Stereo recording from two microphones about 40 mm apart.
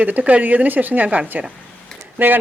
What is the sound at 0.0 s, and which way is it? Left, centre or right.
Speech, right.